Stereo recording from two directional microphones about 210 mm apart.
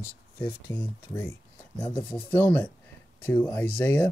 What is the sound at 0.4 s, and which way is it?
Speech, 10° left (ahead or behind).